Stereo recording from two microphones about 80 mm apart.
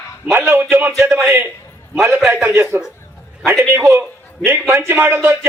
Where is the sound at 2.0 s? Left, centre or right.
Right.